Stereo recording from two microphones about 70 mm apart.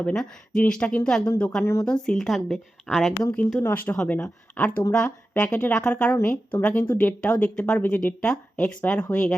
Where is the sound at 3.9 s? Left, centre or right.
Centre.